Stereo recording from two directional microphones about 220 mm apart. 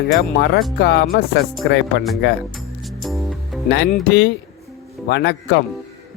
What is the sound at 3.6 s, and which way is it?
Speech, 50° left (ahead or behind).